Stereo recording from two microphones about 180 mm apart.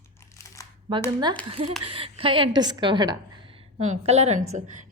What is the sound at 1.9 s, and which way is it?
A woman's voice, 30° right (ahead or behind).